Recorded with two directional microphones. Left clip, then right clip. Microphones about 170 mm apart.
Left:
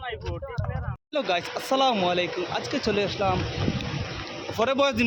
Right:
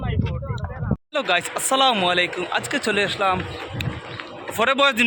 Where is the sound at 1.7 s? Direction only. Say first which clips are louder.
Right 4 dB; 5° right (ahead or behind).